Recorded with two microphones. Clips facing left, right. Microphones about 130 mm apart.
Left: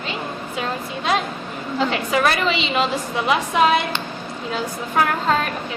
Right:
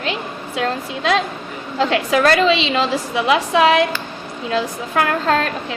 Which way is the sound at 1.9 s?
90° right.